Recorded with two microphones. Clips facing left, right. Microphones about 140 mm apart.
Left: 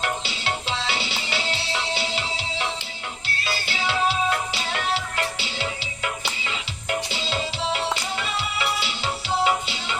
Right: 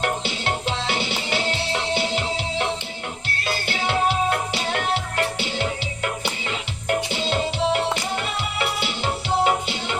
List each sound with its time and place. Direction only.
0.0 s music: 50° right (ahead or behind)